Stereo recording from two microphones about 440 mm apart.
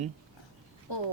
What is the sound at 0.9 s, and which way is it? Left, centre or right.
Speech, left.